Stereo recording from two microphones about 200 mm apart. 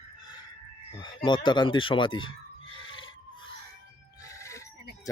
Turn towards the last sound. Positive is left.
turn(degrees=15)  # may be behind; listen again after turning